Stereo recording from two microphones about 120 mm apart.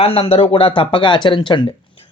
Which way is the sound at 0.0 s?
55° left (ahead or behind).